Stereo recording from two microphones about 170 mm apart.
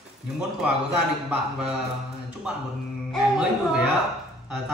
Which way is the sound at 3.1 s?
5° right (ahead or behind).